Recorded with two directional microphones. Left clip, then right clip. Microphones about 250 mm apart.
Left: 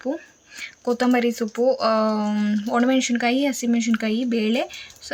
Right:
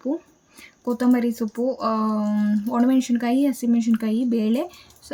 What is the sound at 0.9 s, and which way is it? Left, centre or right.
Speech, centre.